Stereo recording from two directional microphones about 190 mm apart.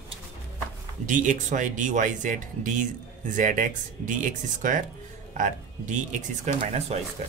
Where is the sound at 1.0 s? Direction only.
40° right (ahead or behind).